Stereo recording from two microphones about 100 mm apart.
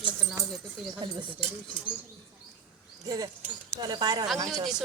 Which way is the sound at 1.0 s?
60° right (ahead or behind).